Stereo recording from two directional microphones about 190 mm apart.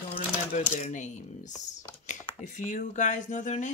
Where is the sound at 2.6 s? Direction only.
40° left (ahead or behind).